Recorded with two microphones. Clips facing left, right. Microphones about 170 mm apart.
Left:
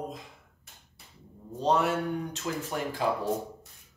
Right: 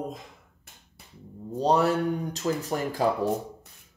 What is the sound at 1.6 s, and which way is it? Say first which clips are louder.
Speech: right 3 dB; 35° right (ahead or behind).